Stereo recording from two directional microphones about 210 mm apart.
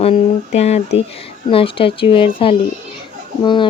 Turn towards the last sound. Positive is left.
turn(degrees=20)  # may be behind; listen again after turning